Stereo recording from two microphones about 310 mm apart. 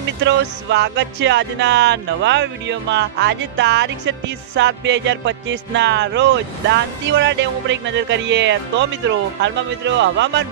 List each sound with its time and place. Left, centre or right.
0.2 s music: right